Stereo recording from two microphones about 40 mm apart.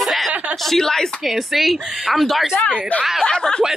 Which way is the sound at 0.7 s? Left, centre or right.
Centre.